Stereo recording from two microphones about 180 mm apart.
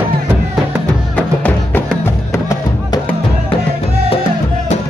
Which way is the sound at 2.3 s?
15° left (ahead or behind).